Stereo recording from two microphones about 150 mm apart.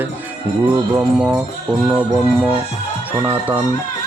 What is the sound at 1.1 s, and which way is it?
Music, 5° right (ahead or behind).